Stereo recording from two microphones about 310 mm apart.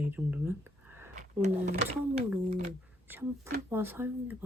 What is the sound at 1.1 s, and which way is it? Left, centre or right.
Speech, right.